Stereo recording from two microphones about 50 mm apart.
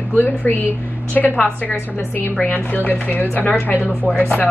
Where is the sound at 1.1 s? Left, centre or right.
Left.